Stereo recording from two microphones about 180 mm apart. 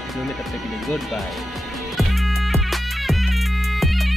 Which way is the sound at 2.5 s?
Centre (ahead or behind).